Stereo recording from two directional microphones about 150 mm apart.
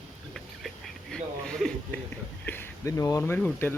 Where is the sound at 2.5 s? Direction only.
15° left (ahead or behind).